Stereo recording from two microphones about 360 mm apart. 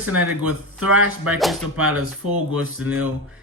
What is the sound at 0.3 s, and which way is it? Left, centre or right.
Speech, right.